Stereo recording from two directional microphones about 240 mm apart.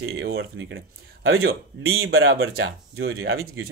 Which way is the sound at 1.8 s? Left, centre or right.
Right.